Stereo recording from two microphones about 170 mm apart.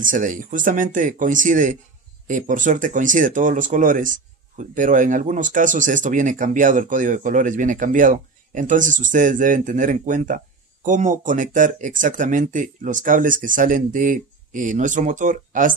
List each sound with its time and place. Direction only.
0.0 s speech: 50° right (ahead or behind)